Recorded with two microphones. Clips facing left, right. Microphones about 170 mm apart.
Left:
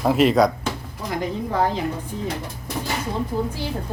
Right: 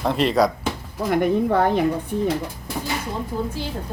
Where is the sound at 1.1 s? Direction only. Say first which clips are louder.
Right 7 dB; 60° right (ahead or behind).